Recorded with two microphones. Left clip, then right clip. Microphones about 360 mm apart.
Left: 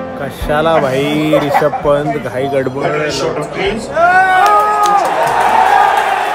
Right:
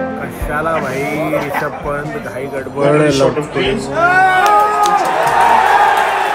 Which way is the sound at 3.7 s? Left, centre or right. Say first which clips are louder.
Left 3 dB; centre.